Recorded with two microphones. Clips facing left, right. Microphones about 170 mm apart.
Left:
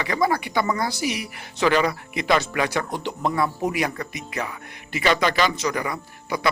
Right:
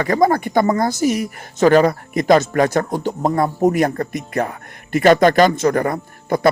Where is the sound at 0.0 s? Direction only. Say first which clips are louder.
Right 7 dB; 45° right (ahead or behind).